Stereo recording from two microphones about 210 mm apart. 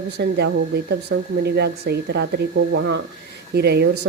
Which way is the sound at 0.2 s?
55° right (ahead or behind).